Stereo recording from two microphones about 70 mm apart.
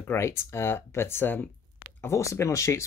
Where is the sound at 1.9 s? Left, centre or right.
Left.